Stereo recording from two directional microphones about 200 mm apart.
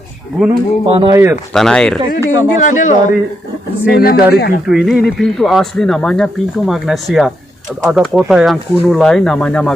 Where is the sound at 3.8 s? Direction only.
50° left (ahead or behind).